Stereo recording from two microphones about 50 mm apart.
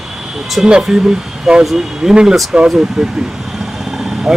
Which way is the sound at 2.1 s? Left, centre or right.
Centre.